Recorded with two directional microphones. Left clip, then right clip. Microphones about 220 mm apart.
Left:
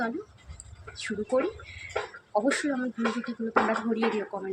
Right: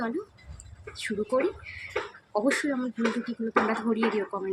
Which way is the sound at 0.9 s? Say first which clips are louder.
Even; 5° right (ahead or behind).